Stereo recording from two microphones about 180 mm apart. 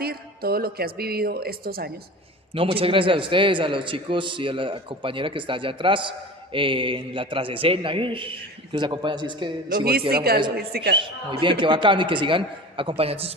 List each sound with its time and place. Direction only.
0.0 s a woman's voice: 60° right (ahead or behind)
2.5 s a man's voice: 30° right (ahead or behind)
9.6 s a woman's voice: 55° right (ahead or behind)
10.9 s a man's voice: 30° right (ahead or behind)